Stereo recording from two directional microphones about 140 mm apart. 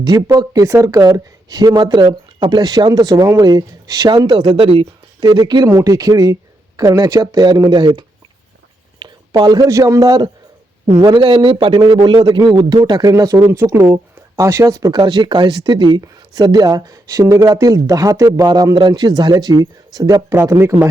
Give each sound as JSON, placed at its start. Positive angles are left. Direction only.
{"t": 0.0, "sound": "speech", "side_deg": -30}
{"t": 4.4, "sound": "a man's voice", "side_deg": -45}